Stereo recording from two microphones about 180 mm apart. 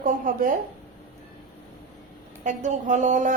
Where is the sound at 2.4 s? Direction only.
45° right (ahead or behind).